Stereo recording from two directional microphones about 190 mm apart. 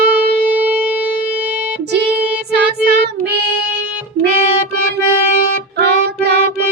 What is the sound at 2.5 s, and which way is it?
Child singing, 55° right (ahead or behind).